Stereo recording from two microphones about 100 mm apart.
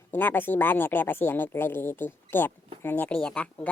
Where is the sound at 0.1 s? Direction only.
20° left (ahead or behind).